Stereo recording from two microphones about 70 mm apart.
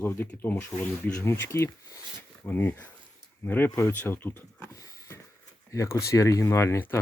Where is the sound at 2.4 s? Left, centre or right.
Left.